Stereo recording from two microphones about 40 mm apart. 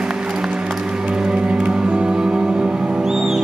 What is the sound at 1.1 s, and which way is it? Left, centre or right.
Music, right.